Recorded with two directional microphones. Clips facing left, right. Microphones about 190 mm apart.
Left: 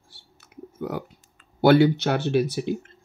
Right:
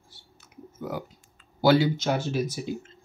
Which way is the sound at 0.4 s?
65° left (ahead or behind).